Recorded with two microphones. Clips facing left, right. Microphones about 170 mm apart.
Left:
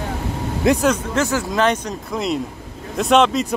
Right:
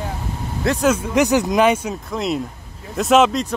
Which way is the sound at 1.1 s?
15° right (ahead or behind).